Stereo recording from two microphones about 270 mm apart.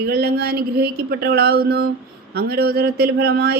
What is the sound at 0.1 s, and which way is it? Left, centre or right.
Speech, right.